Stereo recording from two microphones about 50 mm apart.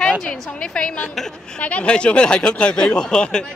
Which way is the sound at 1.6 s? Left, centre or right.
Left.